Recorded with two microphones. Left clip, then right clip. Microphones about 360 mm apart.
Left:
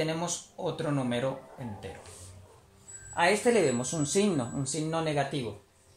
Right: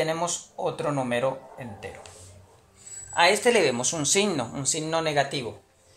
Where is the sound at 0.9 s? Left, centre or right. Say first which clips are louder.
Right 6 dB; right.